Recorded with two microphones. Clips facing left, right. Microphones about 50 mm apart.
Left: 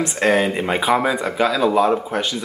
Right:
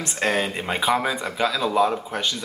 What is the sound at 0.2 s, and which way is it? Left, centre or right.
Speech, centre.